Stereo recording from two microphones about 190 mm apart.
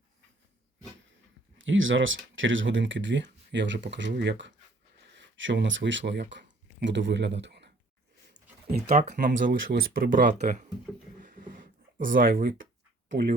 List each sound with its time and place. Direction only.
1.5 s speech: 90° right; by 7.7 s 65° right (ahead or behind)
8.9 s speech: 40° right (ahead or behind)
11.2 s a sound: 45° right (ahead or behind)
13.1 s speech: 60° right (ahead or behind)